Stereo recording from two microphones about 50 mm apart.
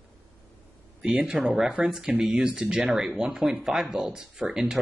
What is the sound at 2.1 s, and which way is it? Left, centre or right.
Speech, right.